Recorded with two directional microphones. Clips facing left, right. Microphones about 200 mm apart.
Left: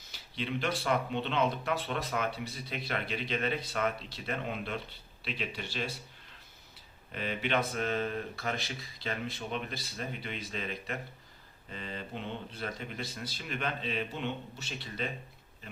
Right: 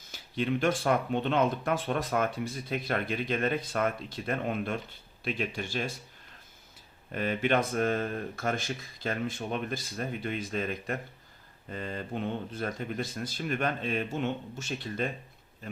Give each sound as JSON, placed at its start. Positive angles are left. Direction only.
{"t": 0.1, "sound": "speech", "side_deg": -50}
{"t": 7.1, "sound": "speech", "side_deg": -50}